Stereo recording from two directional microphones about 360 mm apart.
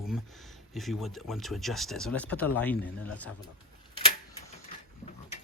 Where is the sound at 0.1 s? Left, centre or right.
Centre.